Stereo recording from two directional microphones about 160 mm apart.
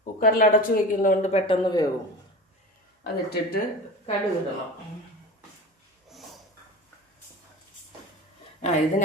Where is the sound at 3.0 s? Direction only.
85° left.